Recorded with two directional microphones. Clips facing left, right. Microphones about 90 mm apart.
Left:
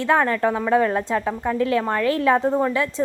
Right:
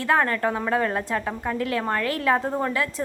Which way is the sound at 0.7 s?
20° left (ahead or behind).